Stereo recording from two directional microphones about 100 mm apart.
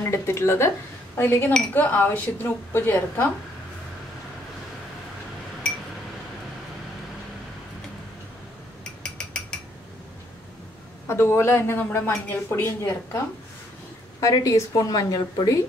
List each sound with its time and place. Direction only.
0.0 s a woman's voice: 30° left (ahead or behind)
9.0 s a sound: 10° left (ahead or behind)
11.1 s a woman's voice: 25° left (ahead or behind)
14.2 s speech: 35° left (ahead or behind)